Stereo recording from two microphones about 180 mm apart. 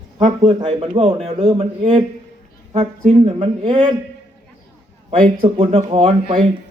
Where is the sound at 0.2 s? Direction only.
35° right (ahead or behind).